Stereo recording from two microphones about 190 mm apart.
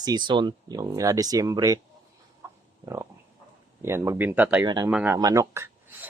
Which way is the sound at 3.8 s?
15° right (ahead or behind).